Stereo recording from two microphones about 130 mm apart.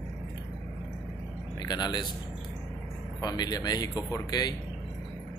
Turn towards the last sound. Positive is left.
turn(degrees=30)  # may be behind; listen again after turning